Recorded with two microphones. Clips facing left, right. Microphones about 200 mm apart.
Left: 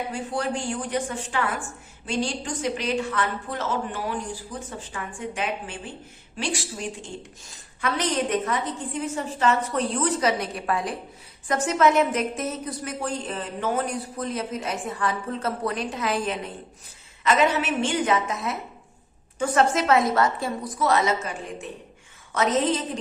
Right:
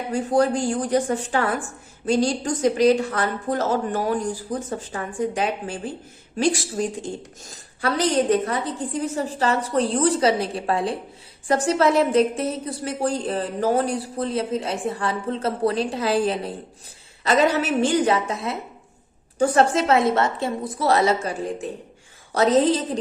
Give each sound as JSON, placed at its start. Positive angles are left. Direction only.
{"t": 0.1, "sound": "a woman's voice", "side_deg": -40}